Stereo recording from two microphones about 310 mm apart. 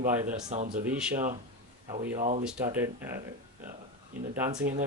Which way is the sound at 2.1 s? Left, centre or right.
Right.